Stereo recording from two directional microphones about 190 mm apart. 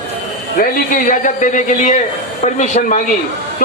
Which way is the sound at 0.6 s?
45° left (ahead or behind).